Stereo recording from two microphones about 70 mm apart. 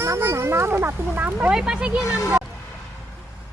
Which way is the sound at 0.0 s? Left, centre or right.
Right.